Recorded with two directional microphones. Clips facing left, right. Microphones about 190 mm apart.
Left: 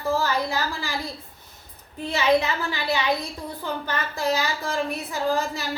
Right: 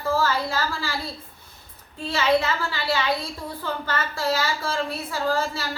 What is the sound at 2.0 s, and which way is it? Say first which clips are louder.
A woman's voice: left 1 dB; 15° left (ahead or behind).